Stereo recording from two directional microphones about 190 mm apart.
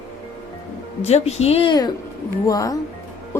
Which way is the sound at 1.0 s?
35° left (ahead or behind).